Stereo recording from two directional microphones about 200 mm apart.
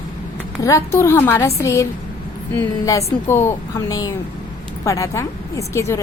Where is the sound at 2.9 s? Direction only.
15° left (ahead or behind).